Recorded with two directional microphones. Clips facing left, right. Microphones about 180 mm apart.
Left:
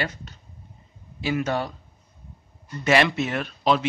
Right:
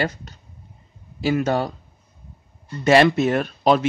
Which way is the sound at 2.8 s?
35° right (ahead or behind).